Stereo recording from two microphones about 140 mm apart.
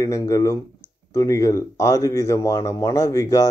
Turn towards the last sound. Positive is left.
turn(degrees=25)  # may be behind; listen again after turning